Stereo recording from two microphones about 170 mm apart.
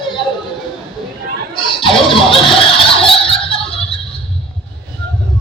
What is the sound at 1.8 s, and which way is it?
Music, 30° left (ahead or behind).